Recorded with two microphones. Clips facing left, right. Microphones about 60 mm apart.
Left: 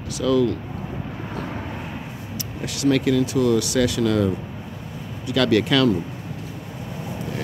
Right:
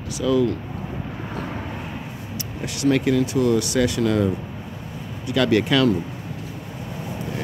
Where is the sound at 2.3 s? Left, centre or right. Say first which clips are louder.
Even; right.